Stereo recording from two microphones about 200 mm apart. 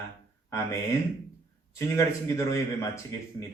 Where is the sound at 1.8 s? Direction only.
15° left (ahead or behind).